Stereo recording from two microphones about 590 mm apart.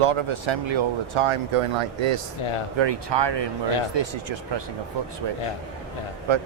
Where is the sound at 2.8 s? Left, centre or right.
Right.